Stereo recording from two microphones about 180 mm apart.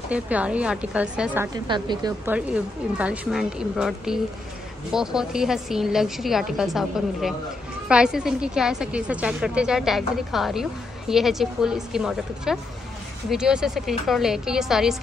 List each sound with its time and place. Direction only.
0.1 s a woman's voice: 5° right (ahead or behind)
1.5 s a woman's voice: 25° right (ahead or behind)
2.2 s a woman's voice: 10° right (ahead or behind)